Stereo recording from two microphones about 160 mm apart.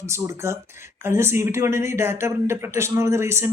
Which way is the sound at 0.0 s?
15° right (ahead or behind).